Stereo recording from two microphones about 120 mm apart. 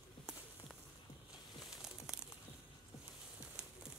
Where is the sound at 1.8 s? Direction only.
5° right (ahead or behind).